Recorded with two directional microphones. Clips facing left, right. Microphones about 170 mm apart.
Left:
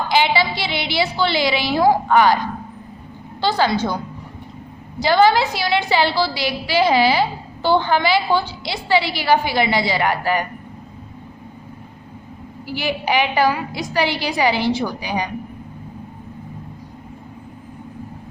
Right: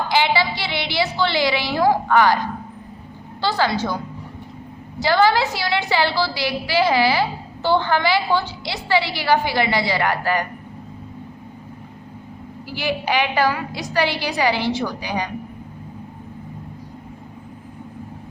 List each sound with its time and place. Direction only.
0.1 s a woman's voice: 15° left (ahead or behind)
3.4 s a woman's voice: 20° left (ahead or behind)
4.9 s a woman's voice: 20° left (ahead or behind)
12.8 s a woman's voice: 15° left (ahead or behind)